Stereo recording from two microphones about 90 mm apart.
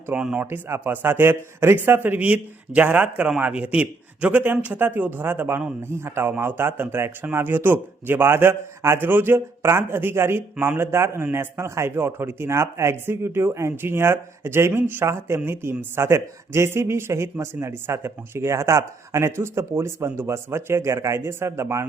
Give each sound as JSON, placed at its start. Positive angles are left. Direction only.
{"t": 0.1, "sound": "speech", "side_deg": -15}
{"t": 0.5, "sound": "speech", "side_deg": -25}